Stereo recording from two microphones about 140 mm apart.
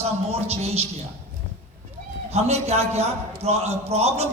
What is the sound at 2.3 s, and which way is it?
A man's voice, 50° right (ahead or behind).